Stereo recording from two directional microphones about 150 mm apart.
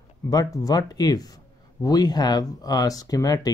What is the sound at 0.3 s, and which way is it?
Speech, 25° left (ahead or behind).